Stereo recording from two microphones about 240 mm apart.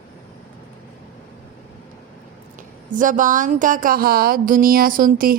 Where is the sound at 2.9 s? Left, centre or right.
Right.